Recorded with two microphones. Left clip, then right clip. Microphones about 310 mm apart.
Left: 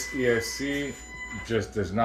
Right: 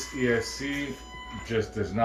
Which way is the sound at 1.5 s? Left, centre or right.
Left.